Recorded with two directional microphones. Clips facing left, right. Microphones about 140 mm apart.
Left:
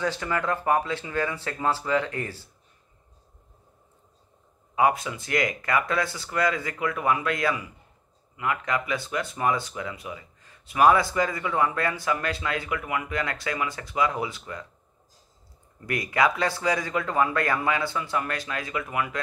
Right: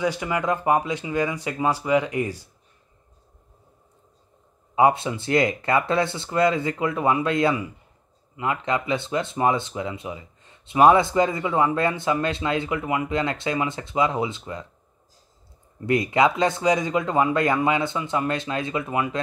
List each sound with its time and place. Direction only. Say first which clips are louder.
0.0 s speech: right 3 dB; 15° right (ahead or behind)
4.7 s speech: right 4 dB; 25° right (ahead or behind)
15.8 s speech: right 5 dB; 25° right (ahead or behind)